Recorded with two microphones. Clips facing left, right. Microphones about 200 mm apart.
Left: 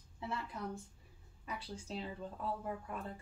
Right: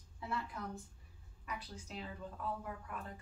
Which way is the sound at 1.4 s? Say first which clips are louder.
Left 2 dB; 30° left (ahead or behind).